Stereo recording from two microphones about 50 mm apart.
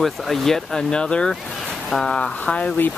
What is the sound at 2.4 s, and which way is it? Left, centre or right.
Speech, left.